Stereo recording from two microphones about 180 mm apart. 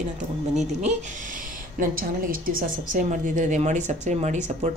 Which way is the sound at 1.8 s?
50° right (ahead or behind).